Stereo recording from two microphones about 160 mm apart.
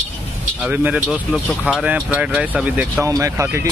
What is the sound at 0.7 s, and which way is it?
Speech, 10° right (ahead or behind).